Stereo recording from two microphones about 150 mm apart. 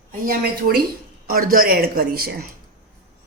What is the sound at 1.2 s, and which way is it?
A woman's voice, 75° right (ahead or behind).